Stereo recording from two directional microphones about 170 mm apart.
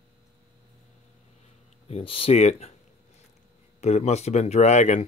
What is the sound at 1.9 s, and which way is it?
Speech, 35° left (ahead or behind).